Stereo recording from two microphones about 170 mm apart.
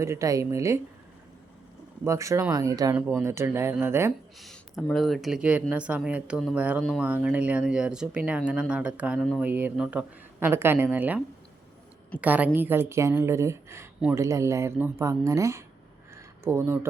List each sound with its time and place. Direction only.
0.0 s speech: 15° right (ahead or behind)
2.0 s speech: 15° right (ahead or behind)
4.4 s speech: centre (ahead or behind)
12.2 s speech: 10° right (ahead or behind)